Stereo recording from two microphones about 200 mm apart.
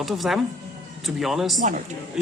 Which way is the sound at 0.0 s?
Centre (ahead or behind).